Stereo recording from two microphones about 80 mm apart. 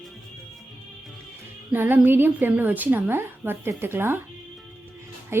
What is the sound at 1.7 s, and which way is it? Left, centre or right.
Speech, right.